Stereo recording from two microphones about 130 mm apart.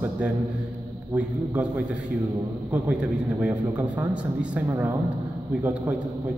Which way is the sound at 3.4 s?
10° right (ahead or behind).